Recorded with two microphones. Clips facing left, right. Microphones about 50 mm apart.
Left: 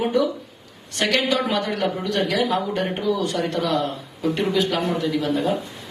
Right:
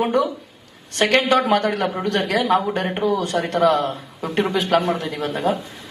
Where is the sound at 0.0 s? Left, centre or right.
Right.